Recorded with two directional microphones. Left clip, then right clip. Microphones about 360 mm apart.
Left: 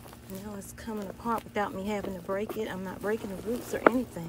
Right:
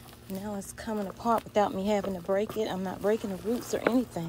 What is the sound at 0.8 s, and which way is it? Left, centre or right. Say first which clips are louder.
Speech: right 4 dB; centre.